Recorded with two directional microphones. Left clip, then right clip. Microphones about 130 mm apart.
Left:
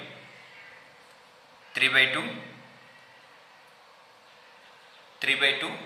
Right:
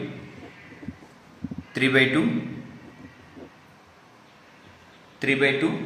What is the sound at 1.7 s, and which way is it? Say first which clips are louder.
Speech: right 2 dB; 20° right (ahead or behind).